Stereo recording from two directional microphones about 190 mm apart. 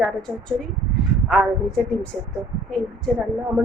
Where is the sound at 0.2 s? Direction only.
5° left (ahead or behind).